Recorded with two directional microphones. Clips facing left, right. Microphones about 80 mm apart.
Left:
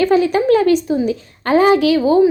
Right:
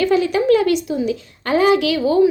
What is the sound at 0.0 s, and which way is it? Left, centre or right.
A woman's voice, left.